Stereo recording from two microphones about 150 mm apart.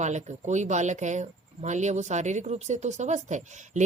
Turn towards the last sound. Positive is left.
turn(degrees=-50)  # may be behind; listen again after turning